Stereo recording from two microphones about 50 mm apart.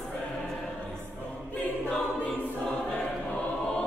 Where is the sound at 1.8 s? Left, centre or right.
Centre.